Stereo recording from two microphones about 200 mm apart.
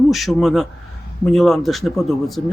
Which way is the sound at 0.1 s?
Centre (ahead or behind).